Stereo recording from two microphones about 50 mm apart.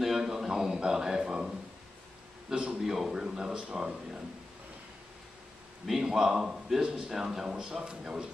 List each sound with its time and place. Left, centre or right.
0.0 s a sound: centre
2.5 s a man's voice: centre
5.9 s a man's voice: centre